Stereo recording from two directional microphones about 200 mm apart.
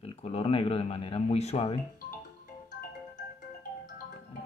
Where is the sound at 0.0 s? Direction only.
30° left (ahead or behind).